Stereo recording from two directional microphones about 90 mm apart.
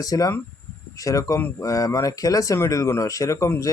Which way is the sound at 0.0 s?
40° left (ahead or behind).